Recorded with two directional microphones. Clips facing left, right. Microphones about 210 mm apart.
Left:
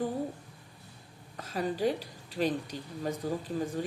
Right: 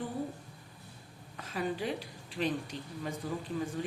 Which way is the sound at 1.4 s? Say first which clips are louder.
Left 4 dB; 40° left (ahead or behind).